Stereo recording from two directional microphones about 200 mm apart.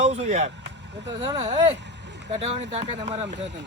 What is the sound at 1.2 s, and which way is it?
Speech, 20° right (ahead or behind).